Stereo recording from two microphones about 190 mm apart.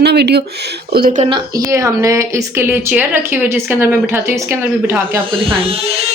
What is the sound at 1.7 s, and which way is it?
A woman's voice, 15° right (ahead or behind).